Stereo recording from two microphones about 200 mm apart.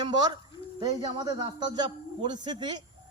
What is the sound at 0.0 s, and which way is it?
A man's voice, 20° right (ahead or behind).